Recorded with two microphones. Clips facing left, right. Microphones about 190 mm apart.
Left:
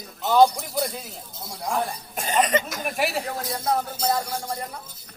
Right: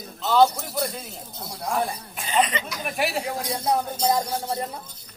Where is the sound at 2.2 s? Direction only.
45° left (ahead or behind).